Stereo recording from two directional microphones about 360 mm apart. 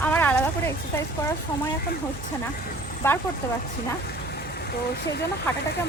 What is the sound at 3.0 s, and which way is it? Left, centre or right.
Speech, centre.